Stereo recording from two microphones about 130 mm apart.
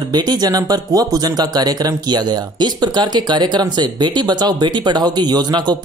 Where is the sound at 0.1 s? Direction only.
30° right (ahead or behind).